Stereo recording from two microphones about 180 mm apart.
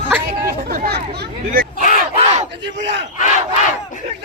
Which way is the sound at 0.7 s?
60° right (ahead or behind).